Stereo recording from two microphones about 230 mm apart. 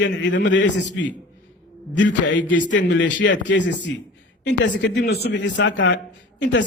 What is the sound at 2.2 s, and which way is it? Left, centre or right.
A man's voice, left.